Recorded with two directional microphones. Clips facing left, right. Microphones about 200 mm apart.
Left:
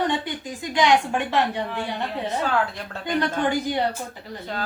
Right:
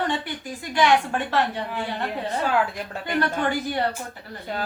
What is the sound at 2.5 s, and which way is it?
Speech, 10° right (ahead or behind).